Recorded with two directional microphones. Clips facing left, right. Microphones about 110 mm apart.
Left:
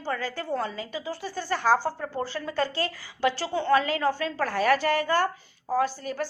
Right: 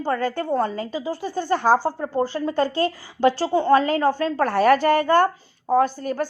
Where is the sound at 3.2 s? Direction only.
40° right (ahead or behind).